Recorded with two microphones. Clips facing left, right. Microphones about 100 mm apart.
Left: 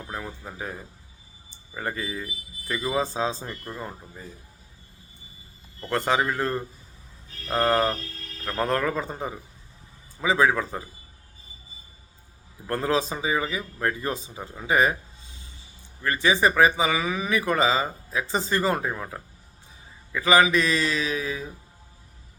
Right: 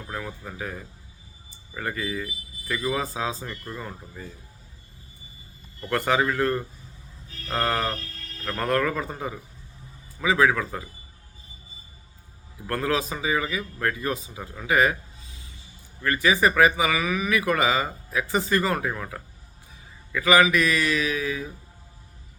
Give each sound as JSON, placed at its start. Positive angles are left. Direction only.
{"t": 0.1, "sound": "a man's voice", "side_deg": 20}
{"t": 5.9, "sound": "a man's voice", "side_deg": 20}
{"t": 7.5, "sound": "a sound", "side_deg": 20}
{"t": 8.4, "sound": "a man's voice", "side_deg": 20}
{"t": 12.6, "sound": "a man's voice", "side_deg": 25}
{"t": 16.0, "sound": "a man's voice", "side_deg": 25}